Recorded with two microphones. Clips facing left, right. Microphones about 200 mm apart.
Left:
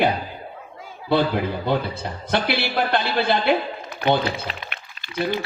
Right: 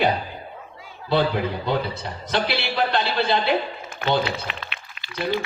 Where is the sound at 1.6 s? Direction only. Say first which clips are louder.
Left 1 dB; 55° left (ahead or behind).